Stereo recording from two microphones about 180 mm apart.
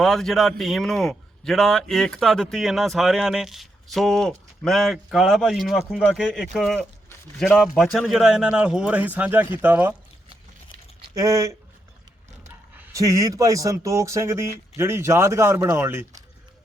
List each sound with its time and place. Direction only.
0.0 s speech: centre (ahead or behind)
11.1 s speech: 15° right (ahead or behind)
12.7 s speech: 15° right (ahead or behind)